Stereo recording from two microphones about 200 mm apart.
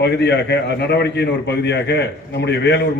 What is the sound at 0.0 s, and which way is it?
A man's voice, 55° left (ahead or behind).